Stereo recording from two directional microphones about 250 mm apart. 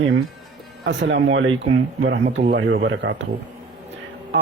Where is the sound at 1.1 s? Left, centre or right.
Right.